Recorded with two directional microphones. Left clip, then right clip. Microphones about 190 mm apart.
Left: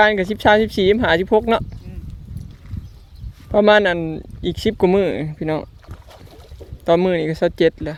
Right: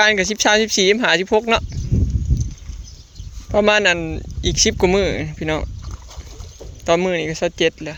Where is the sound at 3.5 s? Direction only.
25° left (ahead or behind).